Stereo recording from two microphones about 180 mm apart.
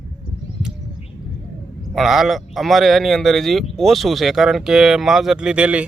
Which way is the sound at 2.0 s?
Centre (ahead or behind).